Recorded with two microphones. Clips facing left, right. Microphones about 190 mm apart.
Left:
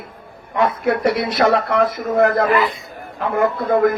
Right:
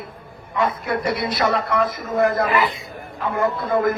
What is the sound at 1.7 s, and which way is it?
A man's voice, 60° left (ahead or behind).